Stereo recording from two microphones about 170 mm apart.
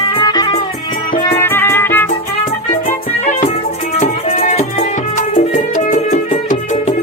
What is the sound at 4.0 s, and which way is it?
Music, 40° left (ahead or behind).